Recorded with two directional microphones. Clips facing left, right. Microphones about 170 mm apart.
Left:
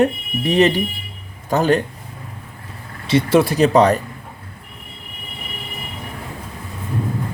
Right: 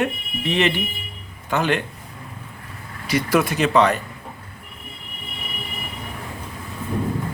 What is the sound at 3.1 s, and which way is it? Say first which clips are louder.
Speech: left 5 dB; 30° left (ahead or behind).